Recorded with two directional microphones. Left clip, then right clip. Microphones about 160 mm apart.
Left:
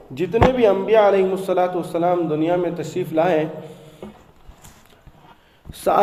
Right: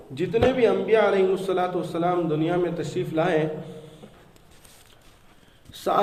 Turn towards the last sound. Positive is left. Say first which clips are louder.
# left 6 dB
turn(degrees=30)  # may be behind; listen again after turning